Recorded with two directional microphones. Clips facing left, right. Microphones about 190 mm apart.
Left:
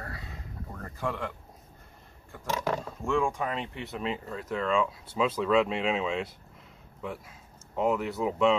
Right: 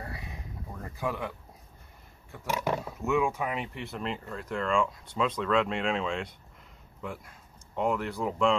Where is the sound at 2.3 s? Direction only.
10° right (ahead or behind).